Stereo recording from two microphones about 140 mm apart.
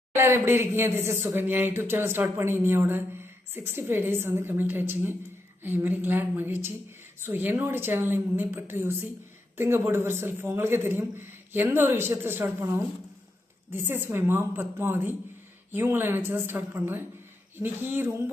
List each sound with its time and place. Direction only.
0.1 s speech: 20° right (ahead or behind)